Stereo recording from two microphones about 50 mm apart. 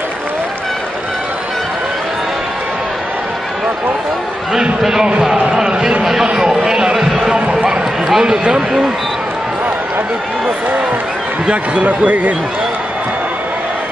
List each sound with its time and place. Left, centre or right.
4.8 s a man's voice: centre
11.4 s speech: right